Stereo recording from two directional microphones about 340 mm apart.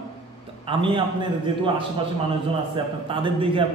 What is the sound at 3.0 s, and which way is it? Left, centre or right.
Speech, centre.